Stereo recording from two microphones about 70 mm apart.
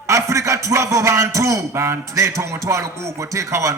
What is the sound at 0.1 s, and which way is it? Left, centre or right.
A man's voice, right.